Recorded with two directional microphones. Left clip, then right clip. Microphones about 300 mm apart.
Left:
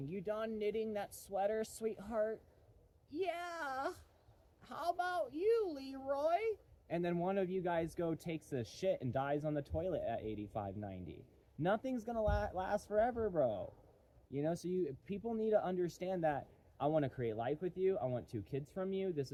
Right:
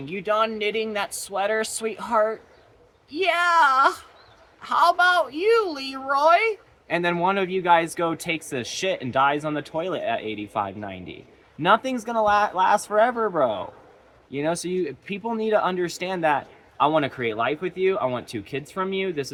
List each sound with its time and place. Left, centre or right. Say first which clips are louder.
0.0 s a woman's voice: right 18 dB; centre